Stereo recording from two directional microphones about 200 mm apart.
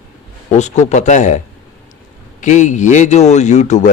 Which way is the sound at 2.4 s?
35° left (ahead or behind).